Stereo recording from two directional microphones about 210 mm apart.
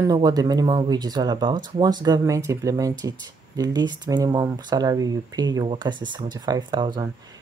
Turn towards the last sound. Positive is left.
turn(degrees=-20)  # may be behind; listen again after turning